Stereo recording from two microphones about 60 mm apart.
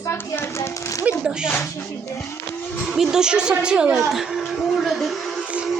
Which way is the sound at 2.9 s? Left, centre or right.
Centre.